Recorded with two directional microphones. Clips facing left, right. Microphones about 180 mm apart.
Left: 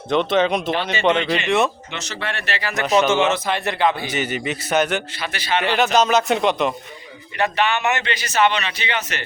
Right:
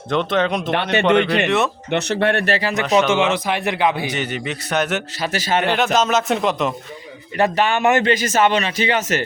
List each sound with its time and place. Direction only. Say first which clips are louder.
0.1 s a man's voice: left 1 dB; centre (ahead or behind)
0.7 s speech: right 3 dB; 65° right (ahead or behind)
1.5 s a man's voice: even; centre (ahead or behind)
1.9 s speech: right 11 dB; 60° right (ahead or behind)
2.8 s a man's voice: even; centre (ahead or behind)
3.3 s a man's voice: right 2 dB; 15° right (ahead or behind)
4.1 s a man's voice: left 1 dB; 5° left (ahead or behind)
5.2 s a man's voice: right 7 dB; 40° right (ahead or behind)
5.6 s a man's voice: left 3 dB; centre (ahead or behind)
7.3 s a man's voice: right 3 dB; 45° right (ahead or behind)